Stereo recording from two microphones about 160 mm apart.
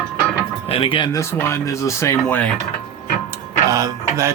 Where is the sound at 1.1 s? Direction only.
15° left (ahead or behind).